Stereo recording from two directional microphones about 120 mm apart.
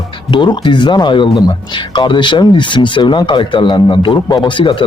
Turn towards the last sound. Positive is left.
turn(degrees=45)  # may be behind; listen again after turning